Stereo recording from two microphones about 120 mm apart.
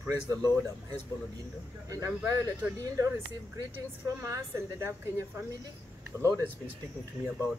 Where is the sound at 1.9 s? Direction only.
25° right (ahead or behind).